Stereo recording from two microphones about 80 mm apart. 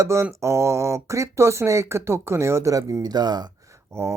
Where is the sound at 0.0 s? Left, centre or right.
Right.